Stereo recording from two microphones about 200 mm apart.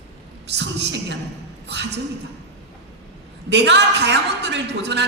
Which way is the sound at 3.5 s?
60° right (ahead or behind).